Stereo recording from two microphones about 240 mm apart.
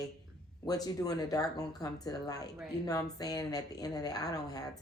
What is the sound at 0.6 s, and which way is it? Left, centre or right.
Speech, centre.